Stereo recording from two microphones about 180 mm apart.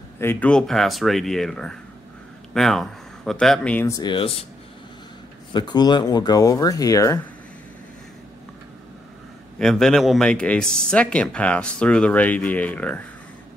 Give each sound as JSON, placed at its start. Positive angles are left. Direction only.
{"t": 0.2, "sound": "speech", "side_deg": 10}
{"t": 5.5, "sound": "speech", "side_deg": 25}
{"t": 9.6, "sound": "speech", "side_deg": 0}